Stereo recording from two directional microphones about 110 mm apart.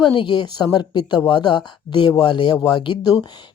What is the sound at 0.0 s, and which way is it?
Speech, 50° left (ahead or behind).